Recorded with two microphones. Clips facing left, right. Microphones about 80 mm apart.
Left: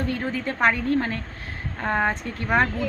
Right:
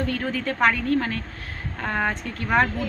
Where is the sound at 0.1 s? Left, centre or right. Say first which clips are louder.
Right 1 dB; left.